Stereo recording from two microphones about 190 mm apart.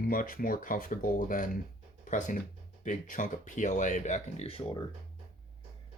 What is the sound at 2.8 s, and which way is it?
Speech, 40° left (ahead or behind).